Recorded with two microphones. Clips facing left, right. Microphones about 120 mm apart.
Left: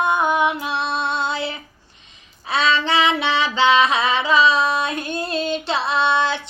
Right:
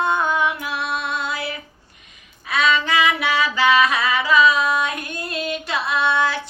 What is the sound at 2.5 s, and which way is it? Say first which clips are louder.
Child singing: even; 30° left (ahead or behind).